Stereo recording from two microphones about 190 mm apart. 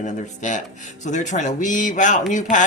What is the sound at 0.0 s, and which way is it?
Speech, 40° left (ahead or behind).